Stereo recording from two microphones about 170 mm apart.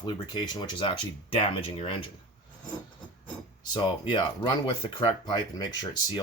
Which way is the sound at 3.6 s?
25° left (ahead or behind).